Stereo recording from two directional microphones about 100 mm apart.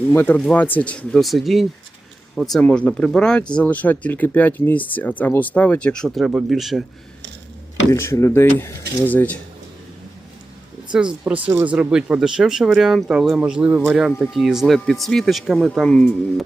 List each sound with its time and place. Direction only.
0.1 s speech: 20° left (ahead or behind)
1.2 s speech: centre (ahead or behind)
2.6 s speech: 10° left (ahead or behind)
7.9 s speech: 30° left (ahead or behind)
11.4 s speech: 15° right (ahead or behind)
14.2 s speech: centre (ahead or behind)
15.9 s speech: 10° left (ahead or behind)